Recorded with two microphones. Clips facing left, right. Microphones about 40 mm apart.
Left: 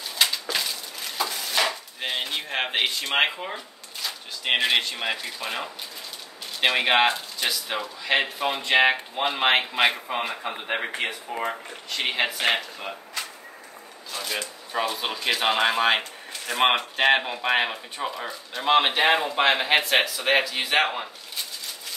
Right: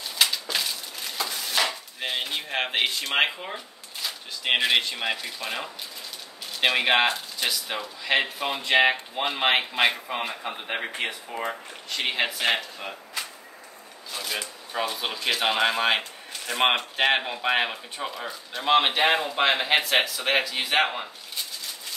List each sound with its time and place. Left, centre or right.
0.2 s dishes: centre
3.5 s speech: centre